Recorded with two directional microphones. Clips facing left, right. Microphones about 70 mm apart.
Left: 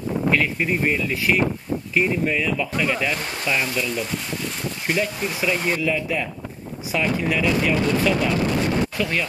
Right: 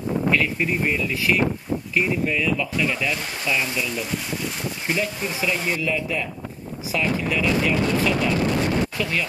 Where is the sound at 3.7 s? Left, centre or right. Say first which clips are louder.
Left 1 dB; centre.